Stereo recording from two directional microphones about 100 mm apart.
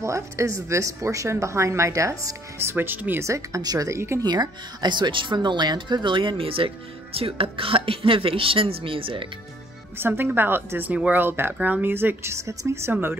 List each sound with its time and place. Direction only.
0.0 s a woman's voice: 30° right (ahead or behind)
4.2 s speech: 45° right (ahead or behind); by 9.3 s 60° right (ahead or behind)
9.9 s a woman's voice: 20° right (ahead or behind)